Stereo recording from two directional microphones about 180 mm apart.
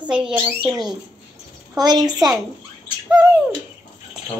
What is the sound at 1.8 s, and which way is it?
Speech, 20° right (ahead or behind).